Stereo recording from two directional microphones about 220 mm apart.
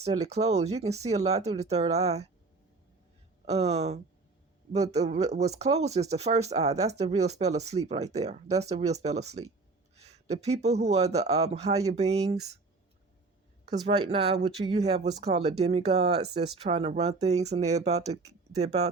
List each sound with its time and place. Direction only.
0.0 s speech: 30° right (ahead or behind)
3.4 s speech: 30° right (ahead or behind)
13.7 s speech: 30° right (ahead or behind)